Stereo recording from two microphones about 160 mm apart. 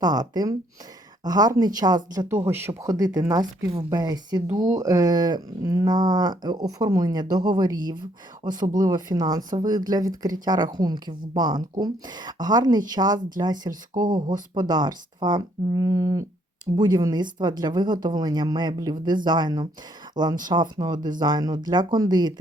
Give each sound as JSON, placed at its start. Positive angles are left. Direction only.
{"t": 0.0, "sound": "a woman's voice", "side_deg": -25}